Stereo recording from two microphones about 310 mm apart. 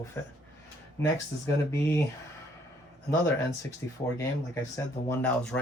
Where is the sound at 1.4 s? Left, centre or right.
Centre.